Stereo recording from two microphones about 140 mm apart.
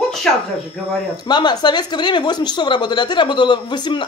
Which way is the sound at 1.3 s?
30° left (ahead or behind).